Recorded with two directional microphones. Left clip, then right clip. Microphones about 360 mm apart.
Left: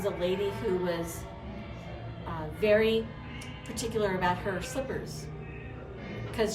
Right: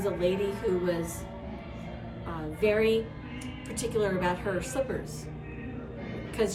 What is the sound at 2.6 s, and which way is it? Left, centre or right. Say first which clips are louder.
A woman's voice: even; centre.